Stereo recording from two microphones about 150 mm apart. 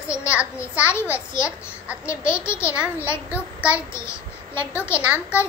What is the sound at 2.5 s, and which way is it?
Speech, 15° left (ahead or behind).